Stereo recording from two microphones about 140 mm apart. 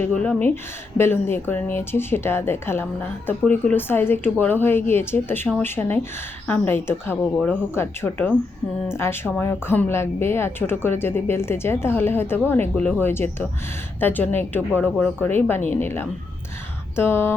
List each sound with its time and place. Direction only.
0.0 s a woman's voice: 10° left (ahead or behind)